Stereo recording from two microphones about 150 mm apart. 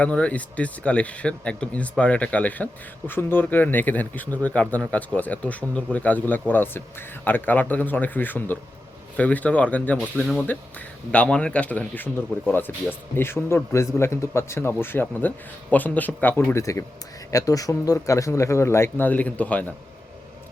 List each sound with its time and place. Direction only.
0.0 s speech: 10° left (ahead or behind)
10.2 s speech: centre (ahead or behind)
10.4 s speech: 10° left (ahead or behind)